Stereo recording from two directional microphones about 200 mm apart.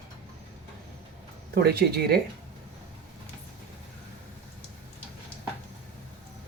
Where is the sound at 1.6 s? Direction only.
50° right (ahead or behind).